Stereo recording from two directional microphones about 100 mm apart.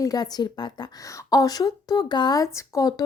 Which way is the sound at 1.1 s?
35° left (ahead or behind).